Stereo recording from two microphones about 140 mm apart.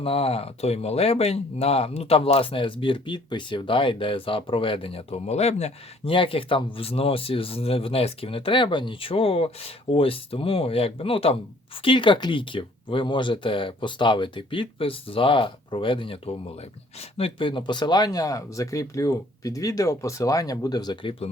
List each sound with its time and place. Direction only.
0.0 s speech: 45° left (ahead or behind)
6.1 s speech: 40° left (ahead or behind)